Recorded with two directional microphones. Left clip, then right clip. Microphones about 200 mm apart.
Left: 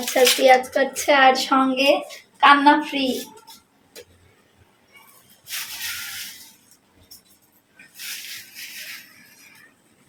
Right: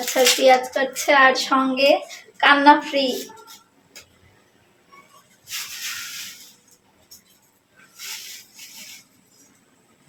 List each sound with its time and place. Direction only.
0.1 s speech: centre (ahead or behind)